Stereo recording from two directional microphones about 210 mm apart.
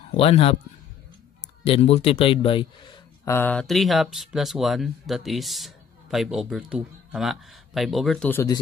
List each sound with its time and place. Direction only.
0.2 s a man's voice: 25° left (ahead or behind)
1.7 s speech: 30° left (ahead or behind)
3.3 s speech: 5° left (ahead or behind)